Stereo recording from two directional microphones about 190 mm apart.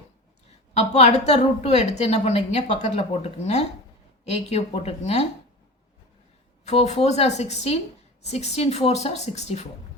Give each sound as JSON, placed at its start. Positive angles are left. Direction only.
{"t": 0.7, "sound": "a woman's voice", "side_deg": 35}
{"t": 6.7, "sound": "a woman's voice", "side_deg": 35}